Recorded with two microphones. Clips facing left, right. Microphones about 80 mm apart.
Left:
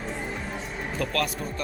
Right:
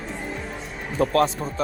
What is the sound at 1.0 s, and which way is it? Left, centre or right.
Speech, right.